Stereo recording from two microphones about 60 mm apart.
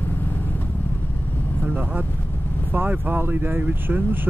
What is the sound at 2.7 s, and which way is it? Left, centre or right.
Speech, right.